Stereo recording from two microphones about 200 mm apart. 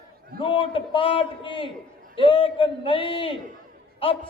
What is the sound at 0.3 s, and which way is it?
A man's voice, 25° left (ahead or behind).